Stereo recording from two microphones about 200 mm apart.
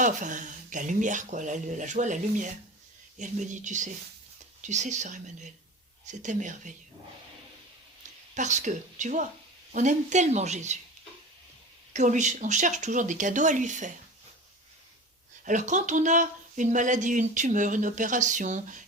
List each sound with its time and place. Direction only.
0.0 s speech: 40° right (ahead or behind)
8.4 s speech: 35° right (ahead or behind)
11.9 s speech: 35° right (ahead or behind)
15.4 s speech: 40° right (ahead or behind)